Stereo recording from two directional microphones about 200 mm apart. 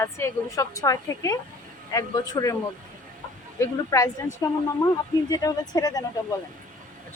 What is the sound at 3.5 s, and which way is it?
Speech, 15° left (ahead or behind).